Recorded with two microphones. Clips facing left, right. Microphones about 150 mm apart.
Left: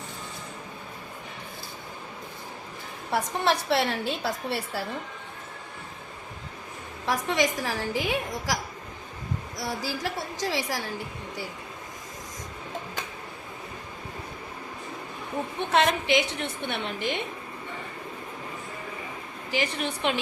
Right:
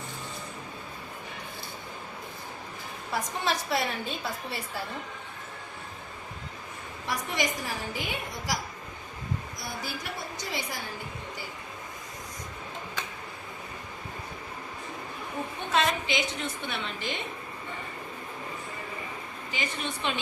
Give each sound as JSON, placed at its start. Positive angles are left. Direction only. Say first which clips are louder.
{"t": 3.1, "sound": "a woman's voice", "louder": "left 5 dB", "side_deg": 65}
{"t": 7.0, "sound": "a woman's voice", "louder": "left 5 dB", "side_deg": 90}
{"t": 9.6, "sound": "a woman's voice", "louder": "left 6 dB", "side_deg": 90}
{"t": 15.7, "sound": "a woman's voice", "louder": "left 5 dB", "side_deg": 70}
{"t": 19.5, "sound": "a woman's voice", "louder": "left 6 dB", "side_deg": 75}